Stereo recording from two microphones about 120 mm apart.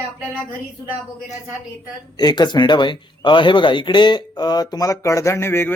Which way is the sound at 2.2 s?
35° left (ahead or behind).